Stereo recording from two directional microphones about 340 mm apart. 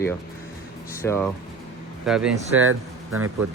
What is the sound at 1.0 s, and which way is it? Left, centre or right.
Speech, centre.